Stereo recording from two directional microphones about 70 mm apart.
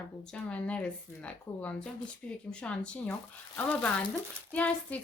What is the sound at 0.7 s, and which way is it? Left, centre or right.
Speech, centre.